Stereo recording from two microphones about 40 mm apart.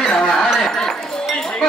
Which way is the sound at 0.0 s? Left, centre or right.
Left.